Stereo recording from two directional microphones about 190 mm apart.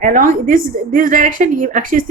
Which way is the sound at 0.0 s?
45° right (ahead or behind).